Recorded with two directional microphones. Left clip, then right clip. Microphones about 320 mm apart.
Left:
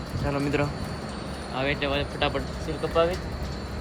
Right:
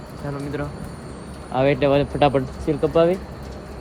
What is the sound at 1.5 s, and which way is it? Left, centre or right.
Speech, centre.